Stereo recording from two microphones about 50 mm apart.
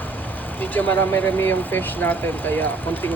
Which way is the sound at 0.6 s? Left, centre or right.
Left.